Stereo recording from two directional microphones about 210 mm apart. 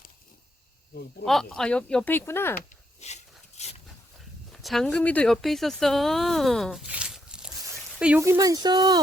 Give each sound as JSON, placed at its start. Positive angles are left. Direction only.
{"t": 1.2, "sound": "speech", "side_deg": 0}
{"t": 3.0, "sound": "a sound", "side_deg": 30}
{"t": 4.6, "sound": "speech", "side_deg": 0}